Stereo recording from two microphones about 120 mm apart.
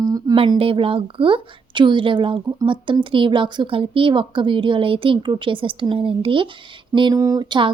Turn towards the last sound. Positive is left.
turn(degrees=-40)  # may be behind; listen again after turning